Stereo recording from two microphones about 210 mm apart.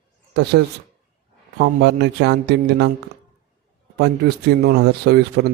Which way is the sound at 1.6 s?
55° right (ahead or behind).